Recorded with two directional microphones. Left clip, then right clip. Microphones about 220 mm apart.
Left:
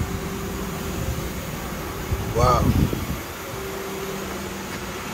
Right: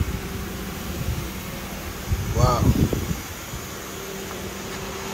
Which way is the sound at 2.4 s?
20° right (ahead or behind).